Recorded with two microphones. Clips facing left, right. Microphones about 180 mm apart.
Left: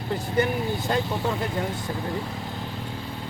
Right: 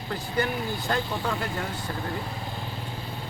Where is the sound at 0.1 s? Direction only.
20° left (ahead or behind).